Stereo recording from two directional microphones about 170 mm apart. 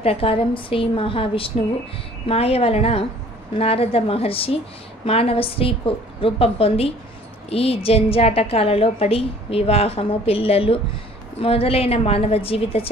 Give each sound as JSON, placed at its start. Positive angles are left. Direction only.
{"t": 0.0, "sound": "a woman's voice", "side_deg": 35}